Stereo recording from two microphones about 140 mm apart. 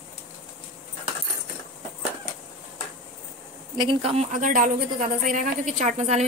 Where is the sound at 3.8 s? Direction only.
40° right (ahead or behind).